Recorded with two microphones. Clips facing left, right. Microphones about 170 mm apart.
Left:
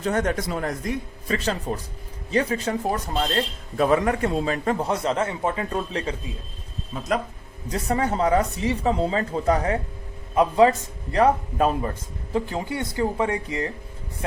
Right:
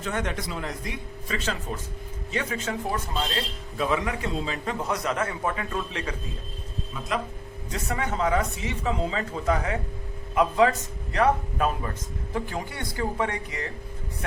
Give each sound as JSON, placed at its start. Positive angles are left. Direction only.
{"t": 0.0, "sound": "speech", "side_deg": 40}
{"t": 3.3, "sound": "speech", "side_deg": 50}
{"t": 4.8, "sound": "a man's voice", "side_deg": 30}
{"t": 7.7, "sound": "a man's voice", "side_deg": 35}